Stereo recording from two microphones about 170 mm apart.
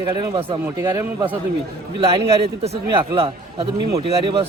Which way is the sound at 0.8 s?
15° right (ahead or behind).